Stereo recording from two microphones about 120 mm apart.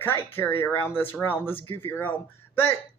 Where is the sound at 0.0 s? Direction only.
20° left (ahead or behind).